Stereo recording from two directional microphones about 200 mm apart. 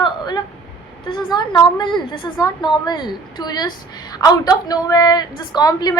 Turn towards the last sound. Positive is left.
turn(degrees=20)  # may be behind; listen again after turning